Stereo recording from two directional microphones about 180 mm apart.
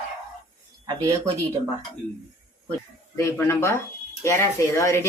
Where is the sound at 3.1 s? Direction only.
15° left (ahead or behind).